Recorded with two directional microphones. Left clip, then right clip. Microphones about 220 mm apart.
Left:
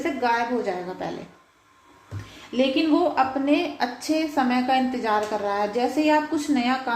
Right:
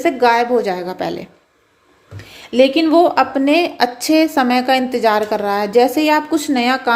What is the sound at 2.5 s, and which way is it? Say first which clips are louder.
A woman's voice: right 10 dB; 45° right (ahead or behind).